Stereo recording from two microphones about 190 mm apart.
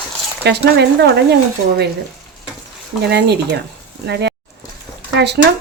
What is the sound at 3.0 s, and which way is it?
Speech, 60° right (ahead or behind).